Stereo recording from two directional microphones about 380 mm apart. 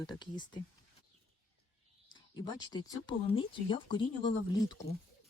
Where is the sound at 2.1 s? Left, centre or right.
Centre.